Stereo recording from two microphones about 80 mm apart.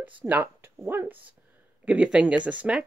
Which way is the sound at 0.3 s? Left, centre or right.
Right.